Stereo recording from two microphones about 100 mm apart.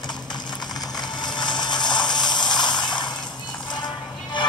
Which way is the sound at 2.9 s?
45° left (ahead or behind).